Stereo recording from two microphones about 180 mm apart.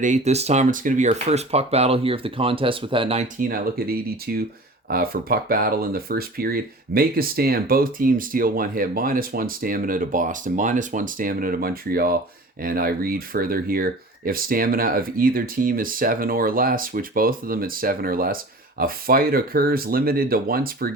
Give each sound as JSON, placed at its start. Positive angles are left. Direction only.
{"t": 0.0, "sound": "speech", "side_deg": -40}
{"t": 3.3, "sound": "speech", "side_deg": -55}